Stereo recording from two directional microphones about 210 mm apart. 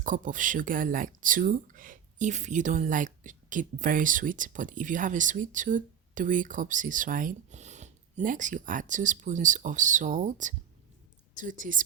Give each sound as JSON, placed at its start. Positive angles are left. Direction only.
{"t": 0.0, "sound": "speech", "side_deg": -40}